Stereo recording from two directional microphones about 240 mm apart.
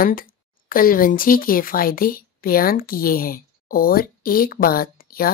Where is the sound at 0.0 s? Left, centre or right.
Left.